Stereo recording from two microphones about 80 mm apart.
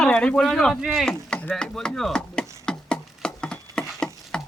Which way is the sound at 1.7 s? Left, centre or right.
Centre.